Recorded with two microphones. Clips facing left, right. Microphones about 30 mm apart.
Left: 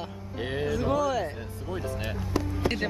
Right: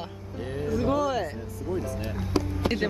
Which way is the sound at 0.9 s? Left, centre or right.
Centre.